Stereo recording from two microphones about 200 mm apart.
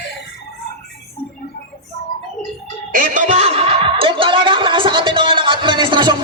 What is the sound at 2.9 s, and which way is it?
Music, 40° right (ahead or behind).